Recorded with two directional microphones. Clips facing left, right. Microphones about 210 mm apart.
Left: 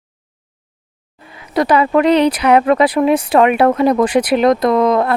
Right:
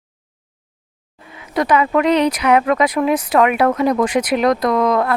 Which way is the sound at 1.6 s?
35° left (ahead or behind).